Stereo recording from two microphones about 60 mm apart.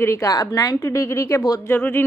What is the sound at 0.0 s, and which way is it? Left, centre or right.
Speech, left.